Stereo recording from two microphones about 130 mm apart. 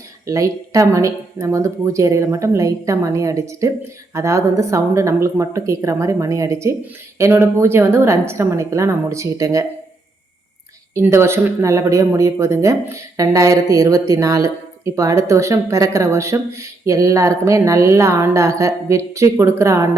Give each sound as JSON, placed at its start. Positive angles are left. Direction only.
{"t": 0.3, "sound": "speech", "side_deg": -25}
{"t": 10.9, "sound": "speech", "side_deg": -20}